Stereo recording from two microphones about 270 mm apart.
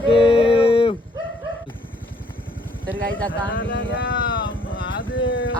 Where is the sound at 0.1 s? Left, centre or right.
Centre.